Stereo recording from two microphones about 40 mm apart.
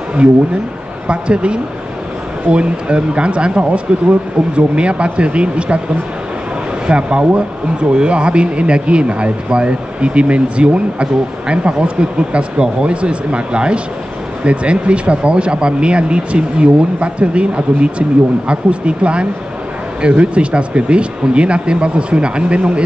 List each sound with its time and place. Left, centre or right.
1.0 s speech: right
6.9 s speech: right